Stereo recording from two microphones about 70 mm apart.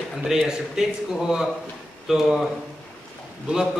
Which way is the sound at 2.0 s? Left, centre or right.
Centre.